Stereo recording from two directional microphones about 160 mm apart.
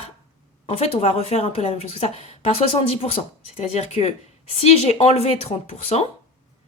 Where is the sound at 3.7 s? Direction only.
40° left (ahead or behind).